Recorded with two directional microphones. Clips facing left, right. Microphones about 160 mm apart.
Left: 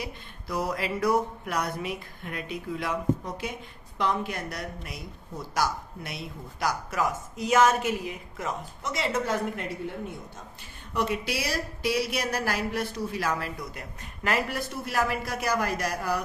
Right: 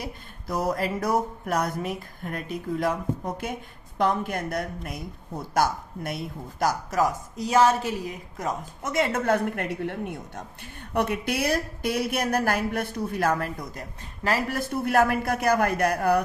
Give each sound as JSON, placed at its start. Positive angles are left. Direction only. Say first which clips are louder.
{"t": 0.0, "sound": "speech", "louder": "right 1 dB", "side_deg": -45}